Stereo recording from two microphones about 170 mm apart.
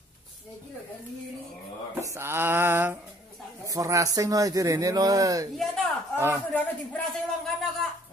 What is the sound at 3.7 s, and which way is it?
Speech, 20° right (ahead or behind).